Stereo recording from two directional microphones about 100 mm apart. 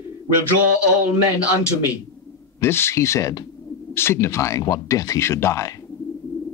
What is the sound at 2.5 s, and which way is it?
Speech, 25° left (ahead or behind).